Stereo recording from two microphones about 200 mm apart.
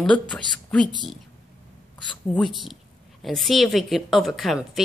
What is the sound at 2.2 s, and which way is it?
A woman's voice, centre (ahead or behind).